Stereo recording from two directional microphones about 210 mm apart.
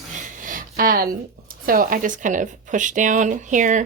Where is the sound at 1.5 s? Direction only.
40° right (ahead or behind).